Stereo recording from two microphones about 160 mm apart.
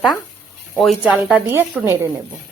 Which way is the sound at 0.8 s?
5° right (ahead or behind).